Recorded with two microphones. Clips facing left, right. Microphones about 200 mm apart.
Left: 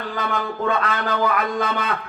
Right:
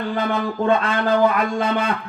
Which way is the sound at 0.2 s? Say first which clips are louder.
Right 2 dB; 30° right (ahead or behind).